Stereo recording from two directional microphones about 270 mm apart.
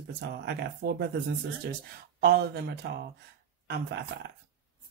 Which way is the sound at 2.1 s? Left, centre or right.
Right.